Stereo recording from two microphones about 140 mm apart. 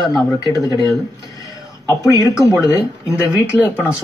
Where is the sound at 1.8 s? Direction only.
25° left (ahead or behind).